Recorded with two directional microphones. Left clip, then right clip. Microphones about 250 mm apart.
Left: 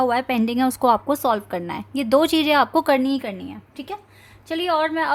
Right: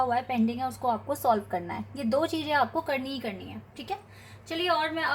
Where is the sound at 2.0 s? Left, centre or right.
Left.